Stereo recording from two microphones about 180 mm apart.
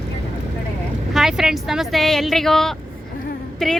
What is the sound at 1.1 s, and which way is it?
Speech, centre (ahead or behind).